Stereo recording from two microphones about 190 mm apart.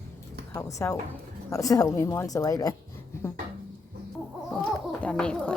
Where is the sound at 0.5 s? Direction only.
15° left (ahead or behind).